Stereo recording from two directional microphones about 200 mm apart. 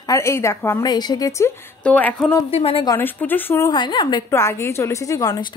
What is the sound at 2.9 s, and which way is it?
A woman's voice, 10° left (ahead or behind).